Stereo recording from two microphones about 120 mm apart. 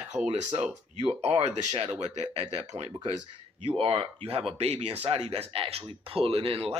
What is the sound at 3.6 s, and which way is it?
Speech, 50° right (ahead or behind).